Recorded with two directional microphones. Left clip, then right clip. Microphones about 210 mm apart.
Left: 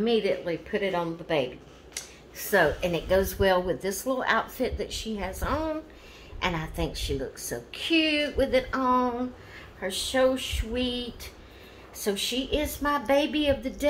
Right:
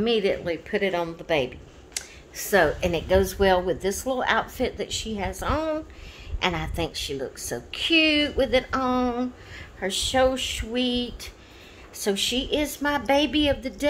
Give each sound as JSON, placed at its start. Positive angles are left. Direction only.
{"t": 0.0, "sound": "a woman's voice", "side_deg": -55}